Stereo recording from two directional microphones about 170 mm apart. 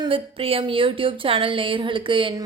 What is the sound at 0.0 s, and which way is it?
A woman's voice, 30° right (ahead or behind).